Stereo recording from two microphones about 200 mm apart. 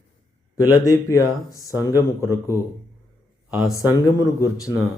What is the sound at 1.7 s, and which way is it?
Speech, 10° right (ahead or behind).